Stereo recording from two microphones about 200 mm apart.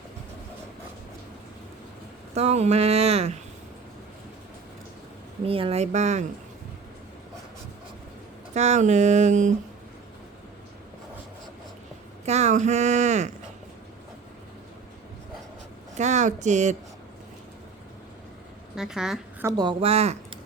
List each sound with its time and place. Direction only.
2.3 s speech: 35° right (ahead or behind)
5.5 s speech: 25° right (ahead or behind)
8.5 s speech: 35° right (ahead or behind)
12.2 s speech: 35° right (ahead or behind)
16.0 s speech: 35° right (ahead or behind)
18.8 s speech: 5° right (ahead or behind)
19.5 s speech: 20° right (ahead or behind)